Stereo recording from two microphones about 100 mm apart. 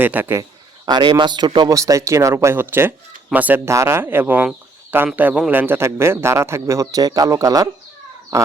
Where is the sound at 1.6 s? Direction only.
35° right (ahead or behind).